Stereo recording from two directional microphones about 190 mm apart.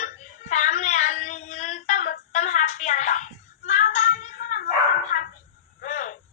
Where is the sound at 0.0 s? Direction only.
40° left (ahead or behind).